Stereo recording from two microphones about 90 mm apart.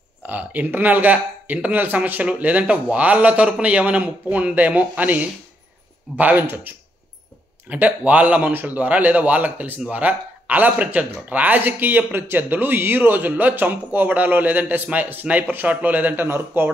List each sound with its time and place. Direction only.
0.2 s a man's voice: 20° right (ahead or behind)